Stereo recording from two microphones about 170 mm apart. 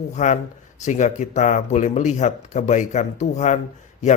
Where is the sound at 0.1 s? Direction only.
45° left (ahead or behind).